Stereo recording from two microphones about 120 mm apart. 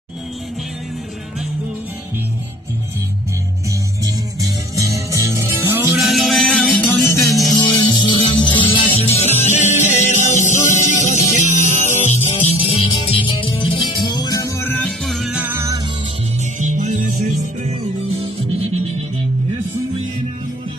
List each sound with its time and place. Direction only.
4.0 s music: 30° right (ahead or behind)
5.9 s music: centre (ahead or behind); by 7.2 s 15° left (ahead or behind)
7.5 s music: 30° left (ahead or behind)
14.9 s music: centre (ahead or behind)
15.4 s music: 25° right (ahead or behind)
16.5 s music: 90° right; by 17.7 s 65° right (ahead or behind)
18.2 s music: 50° right (ahead or behind)